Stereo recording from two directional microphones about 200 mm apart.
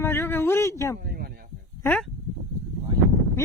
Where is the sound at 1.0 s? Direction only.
50° right (ahead or behind).